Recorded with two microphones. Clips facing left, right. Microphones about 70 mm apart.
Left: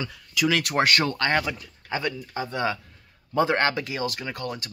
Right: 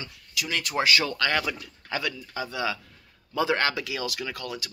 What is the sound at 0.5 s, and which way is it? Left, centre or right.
Speech, left.